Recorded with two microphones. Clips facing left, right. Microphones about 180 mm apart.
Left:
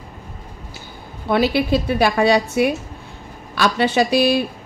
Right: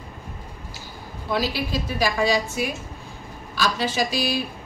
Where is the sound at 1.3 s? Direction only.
60° left (ahead or behind).